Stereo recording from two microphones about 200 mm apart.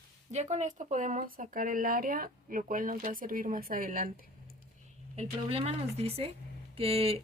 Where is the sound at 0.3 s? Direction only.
35° right (ahead or behind).